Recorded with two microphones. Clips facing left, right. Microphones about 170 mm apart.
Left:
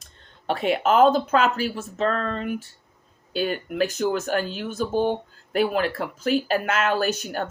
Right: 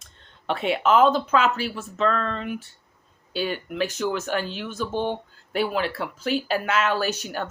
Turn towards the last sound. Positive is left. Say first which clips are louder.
# left 1 dB
turn(degrees=50)  # may be behind; listen again after turning